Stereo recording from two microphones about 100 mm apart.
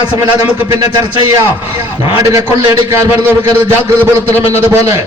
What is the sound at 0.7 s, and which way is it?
Speech, 45° right (ahead or behind).